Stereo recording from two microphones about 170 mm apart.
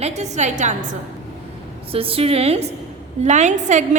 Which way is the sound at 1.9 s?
35° right (ahead or behind).